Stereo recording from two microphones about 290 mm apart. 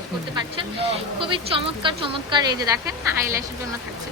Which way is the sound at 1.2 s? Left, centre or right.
Centre.